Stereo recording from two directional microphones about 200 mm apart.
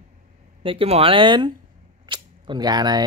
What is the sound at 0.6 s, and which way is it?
Speech, 30° right (ahead or behind).